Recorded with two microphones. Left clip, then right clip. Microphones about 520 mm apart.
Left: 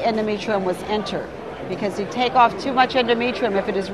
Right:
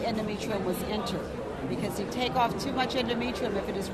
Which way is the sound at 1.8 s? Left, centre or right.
Left.